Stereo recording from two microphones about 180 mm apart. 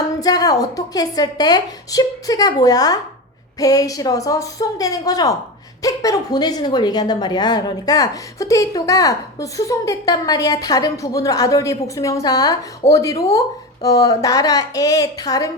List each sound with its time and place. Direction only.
0.2 s a woman's voice: 20° left (ahead or behind)